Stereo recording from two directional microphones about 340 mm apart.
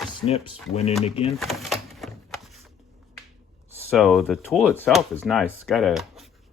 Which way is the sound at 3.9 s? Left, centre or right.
Centre.